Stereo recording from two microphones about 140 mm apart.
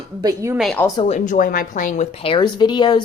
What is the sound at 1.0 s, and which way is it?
Speech, 55° left (ahead or behind).